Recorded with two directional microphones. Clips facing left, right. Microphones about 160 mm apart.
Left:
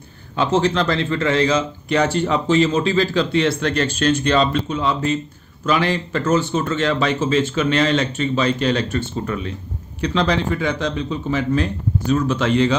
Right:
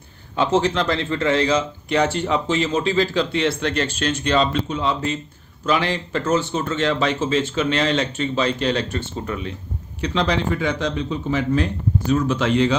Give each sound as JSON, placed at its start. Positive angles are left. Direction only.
{"t": 0.4, "sound": "a man's voice", "side_deg": -20}